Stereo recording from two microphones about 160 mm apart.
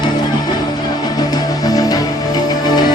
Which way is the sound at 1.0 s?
25° left (ahead or behind).